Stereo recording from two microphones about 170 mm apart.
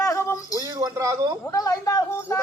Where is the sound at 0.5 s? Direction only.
20° right (ahead or behind).